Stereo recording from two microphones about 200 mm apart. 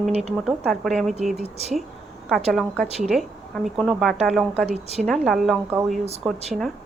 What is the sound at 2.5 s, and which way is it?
Speech, centre (ahead or behind).